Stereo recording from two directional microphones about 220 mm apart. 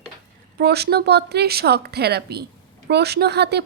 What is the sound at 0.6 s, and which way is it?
A woman's voice, 45° right (ahead or behind).